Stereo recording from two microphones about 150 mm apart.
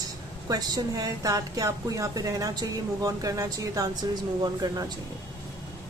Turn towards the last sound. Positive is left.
turn(degrees=-25)  # may be behind; listen again after turning